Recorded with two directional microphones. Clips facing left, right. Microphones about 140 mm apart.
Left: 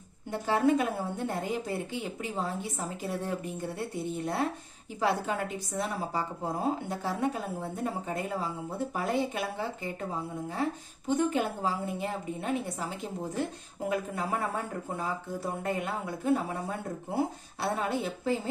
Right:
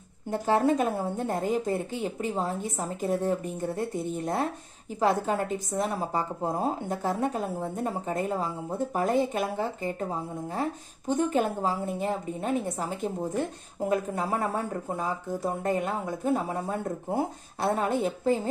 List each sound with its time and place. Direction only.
0.3 s a woman's voice: 45° right (ahead or behind)
11.1 s a woman's voice: 45° right (ahead or behind)